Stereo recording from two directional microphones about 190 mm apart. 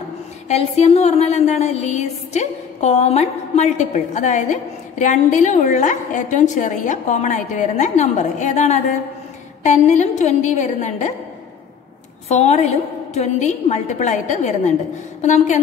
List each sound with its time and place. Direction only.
0.5 s music: 35° left (ahead or behind)
12.3 s music: 35° left (ahead or behind)